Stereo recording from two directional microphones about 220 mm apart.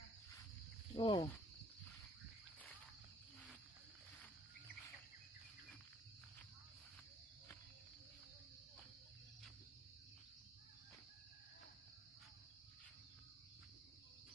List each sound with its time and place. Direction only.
0.9 s speech: 20° left (ahead or behind)